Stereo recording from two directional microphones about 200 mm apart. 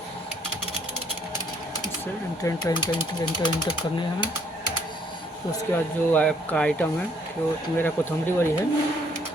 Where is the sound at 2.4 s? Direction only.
15° left (ahead or behind).